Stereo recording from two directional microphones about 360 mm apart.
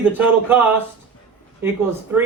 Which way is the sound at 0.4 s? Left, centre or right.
Centre.